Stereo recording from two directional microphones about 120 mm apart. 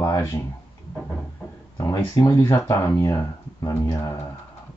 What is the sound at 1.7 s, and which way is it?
Speech, 25° left (ahead or behind).